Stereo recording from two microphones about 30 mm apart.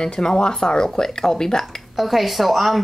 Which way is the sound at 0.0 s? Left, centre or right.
Left.